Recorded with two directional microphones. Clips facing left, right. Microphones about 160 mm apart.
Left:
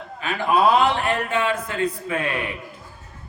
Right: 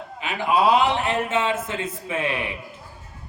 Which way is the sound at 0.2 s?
15° right (ahead or behind).